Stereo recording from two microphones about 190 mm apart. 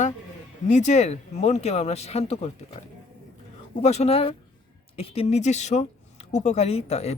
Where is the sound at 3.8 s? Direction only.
35° left (ahead or behind).